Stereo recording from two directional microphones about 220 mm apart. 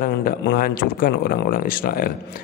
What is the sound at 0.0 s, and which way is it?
Speech, 40° left (ahead or behind).